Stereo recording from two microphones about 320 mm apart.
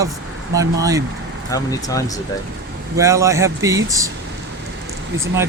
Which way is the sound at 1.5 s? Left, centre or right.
Centre.